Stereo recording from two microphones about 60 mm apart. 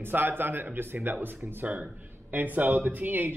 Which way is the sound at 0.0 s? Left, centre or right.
Right.